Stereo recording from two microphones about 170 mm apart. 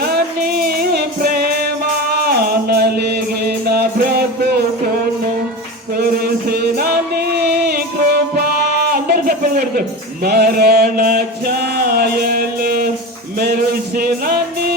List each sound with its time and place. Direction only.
0.8 s music: 60° right (ahead or behind)
6.0 s music: 65° right (ahead or behind)
10.2 s a sound: 65° right (ahead or behind)
13.4 s music: 65° right (ahead or behind)